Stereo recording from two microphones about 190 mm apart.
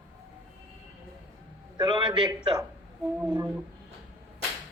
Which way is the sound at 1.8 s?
25° right (ahead or behind).